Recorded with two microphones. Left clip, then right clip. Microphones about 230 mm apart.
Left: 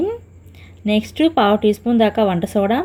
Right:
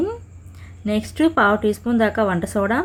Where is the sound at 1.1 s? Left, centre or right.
Right.